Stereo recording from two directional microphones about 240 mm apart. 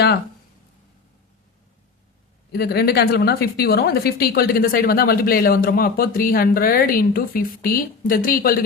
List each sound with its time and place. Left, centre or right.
2.5 s a woman's voice: left